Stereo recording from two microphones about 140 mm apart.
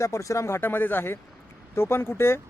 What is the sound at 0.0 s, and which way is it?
Speech, 20° left (ahead or behind).